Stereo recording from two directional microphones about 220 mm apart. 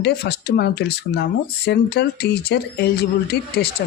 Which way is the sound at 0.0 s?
45° left (ahead or behind).